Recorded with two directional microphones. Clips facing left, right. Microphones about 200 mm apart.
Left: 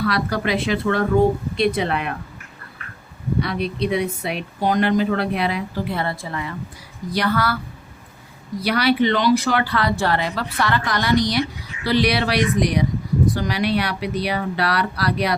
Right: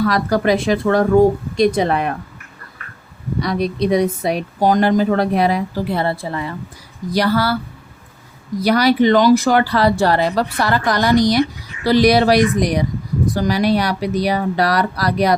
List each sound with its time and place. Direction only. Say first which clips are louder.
0.0 s speech: right 5 dB; 45° right (ahead or behind)
3.4 s speech: right 7 dB; 40° right (ahead or behind)
8.6 s speech: right 5 dB; 40° right (ahead or behind)